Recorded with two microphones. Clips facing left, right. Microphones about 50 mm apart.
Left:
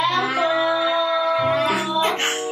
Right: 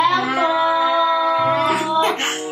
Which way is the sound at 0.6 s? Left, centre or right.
Centre.